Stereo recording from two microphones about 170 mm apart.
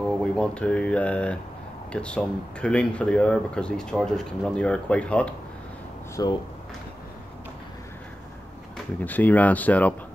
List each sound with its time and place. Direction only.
0.2 s speech: 5° left (ahead or behind)
6.2 s speech: 20° left (ahead or behind)
9.0 s speech: 10° left (ahead or behind)